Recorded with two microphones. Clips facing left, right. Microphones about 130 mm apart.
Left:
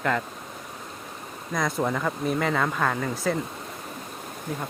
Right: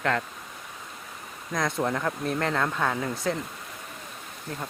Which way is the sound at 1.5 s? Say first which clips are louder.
Left 1 dB; centre (ahead or behind).